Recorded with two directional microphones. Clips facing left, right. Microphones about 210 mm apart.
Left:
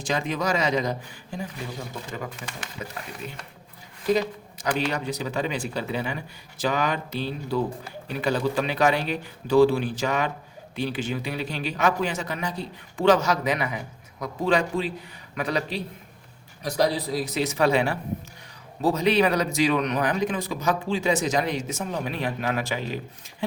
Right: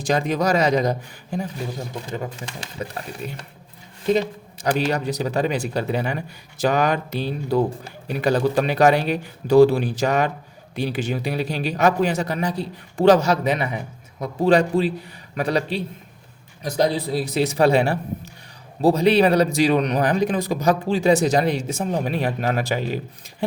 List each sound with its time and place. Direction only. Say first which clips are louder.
0.0 s speech: right 6 dB; 40° right (ahead or behind)
2.1 s speech: right 5 dB; 30° right (ahead or behind)
4.0 s speech: right 3 dB; 25° right (ahead or behind)
4.8 s speech: right 5 dB; 40° right (ahead or behind)